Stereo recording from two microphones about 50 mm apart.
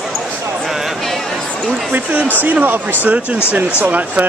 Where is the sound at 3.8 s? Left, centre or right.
Right.